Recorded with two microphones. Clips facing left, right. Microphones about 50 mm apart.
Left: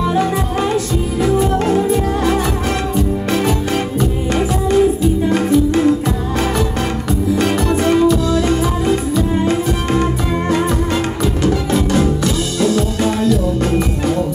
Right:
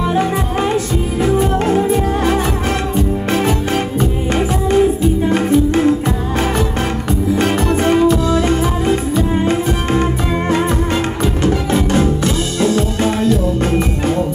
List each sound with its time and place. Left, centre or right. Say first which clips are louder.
0.0 s music: even; right
7.3 s music: right 1 dB; right
11.4 s music: even; right